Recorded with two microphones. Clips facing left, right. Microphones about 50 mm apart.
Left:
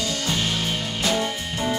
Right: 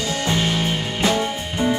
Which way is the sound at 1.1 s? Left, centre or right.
Centre.